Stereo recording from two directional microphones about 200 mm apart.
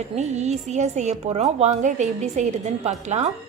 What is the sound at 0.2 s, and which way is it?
A woman's voice, 35° right (ahead or behind).